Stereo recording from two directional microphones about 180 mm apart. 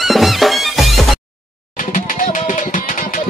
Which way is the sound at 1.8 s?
50° left (ahead or behind).